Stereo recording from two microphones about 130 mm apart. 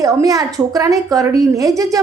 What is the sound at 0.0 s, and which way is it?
A woman's voice, 25° right (ahead or behind).